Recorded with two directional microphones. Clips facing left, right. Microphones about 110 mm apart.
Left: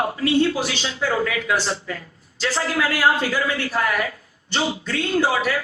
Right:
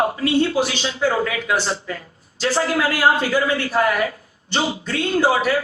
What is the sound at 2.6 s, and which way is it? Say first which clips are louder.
Speech: right 2 dB; 30° right (ahead or behind).